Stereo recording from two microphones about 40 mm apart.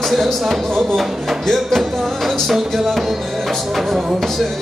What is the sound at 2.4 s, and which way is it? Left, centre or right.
Music, centre.